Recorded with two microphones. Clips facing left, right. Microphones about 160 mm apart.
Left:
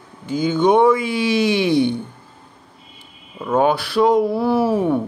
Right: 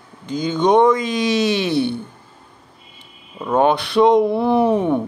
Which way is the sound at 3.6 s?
5° left (ahead or behind).